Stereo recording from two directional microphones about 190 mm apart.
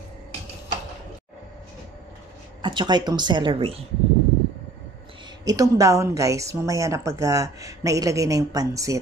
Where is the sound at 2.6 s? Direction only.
25° right (ahead or behind).